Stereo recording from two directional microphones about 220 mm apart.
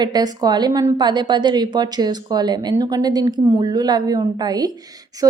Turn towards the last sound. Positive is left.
turn(degrees=-15)  # may be behind; listen again after turning